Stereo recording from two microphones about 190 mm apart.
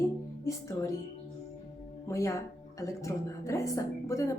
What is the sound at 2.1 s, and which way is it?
A woman's voice, 15° left (ahead or behind).